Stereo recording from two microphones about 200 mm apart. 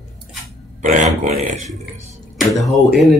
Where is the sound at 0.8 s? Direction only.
40° right (ahead or behind).